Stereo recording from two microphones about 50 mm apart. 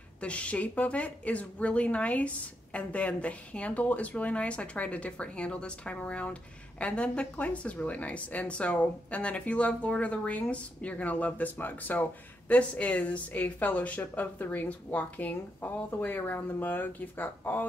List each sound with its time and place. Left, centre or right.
0.2 s speech: left